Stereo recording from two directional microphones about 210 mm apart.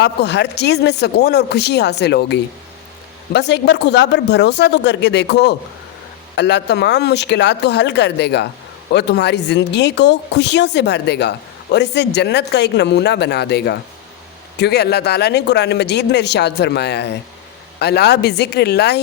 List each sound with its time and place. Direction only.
0.0 s speech: 55° left (ahead or behind)